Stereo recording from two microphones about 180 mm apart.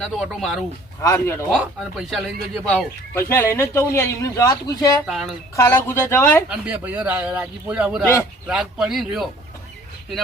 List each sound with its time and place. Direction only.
0.0 s speech: centre (ahead or behind)
1.0 s a man's voice: 15° left (ahead or behind)
1.5 s speech: centre (ahead or behind)
3.2 s a man's voice: 15° left (ahead or behind)
5.0 s speech: centre (ahead or behind)
5.5 s a man's voice: 15° left (ahead or behind)
6.5 s speech: 10° right (ahead or behind)